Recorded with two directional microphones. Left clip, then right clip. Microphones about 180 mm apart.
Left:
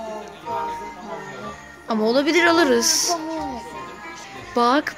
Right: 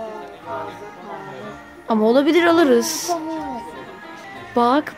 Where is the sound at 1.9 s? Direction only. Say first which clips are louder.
Right 3 dB; 20° right (ahead or behind).